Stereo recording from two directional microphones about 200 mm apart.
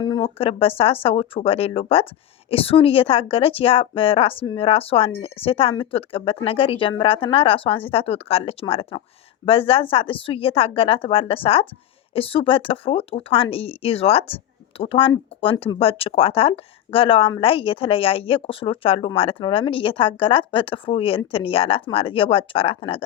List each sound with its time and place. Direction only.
0.0 s speech: 25° left (ahead or behind)